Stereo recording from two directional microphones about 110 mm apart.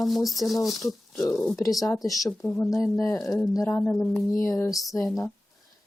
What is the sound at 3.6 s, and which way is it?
Speech, 15° left (ahead or behind).